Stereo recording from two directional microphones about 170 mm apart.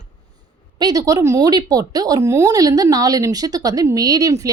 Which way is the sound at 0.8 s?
20° right (ahead or behind).